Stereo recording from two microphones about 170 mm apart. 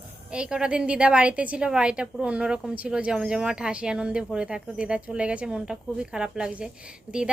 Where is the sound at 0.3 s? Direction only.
5° right (ahead or behind).